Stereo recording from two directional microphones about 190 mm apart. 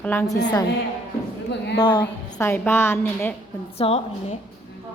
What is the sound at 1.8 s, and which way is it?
Speech, 25° left (ahead or behind).